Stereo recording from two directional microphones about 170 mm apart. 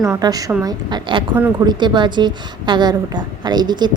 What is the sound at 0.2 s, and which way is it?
A woman's voice, 20° right (ahead or behind).